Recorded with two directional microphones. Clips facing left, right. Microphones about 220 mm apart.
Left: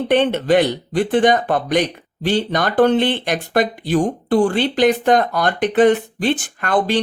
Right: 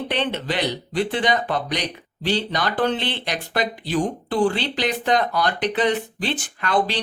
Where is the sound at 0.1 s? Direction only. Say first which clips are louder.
Left 13 dB; 50° left (ahead or behind).